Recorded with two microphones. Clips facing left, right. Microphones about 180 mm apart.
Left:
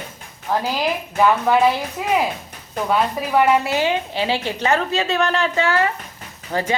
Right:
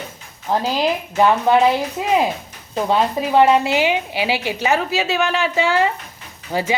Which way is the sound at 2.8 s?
25° right (ahead or behind).